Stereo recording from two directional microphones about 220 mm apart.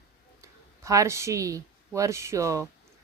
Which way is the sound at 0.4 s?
15° right (ahead or behind).